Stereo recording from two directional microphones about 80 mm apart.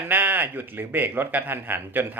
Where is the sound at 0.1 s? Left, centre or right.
Right.